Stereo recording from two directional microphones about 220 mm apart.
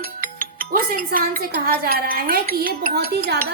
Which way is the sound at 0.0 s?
40° right (ahead or behind).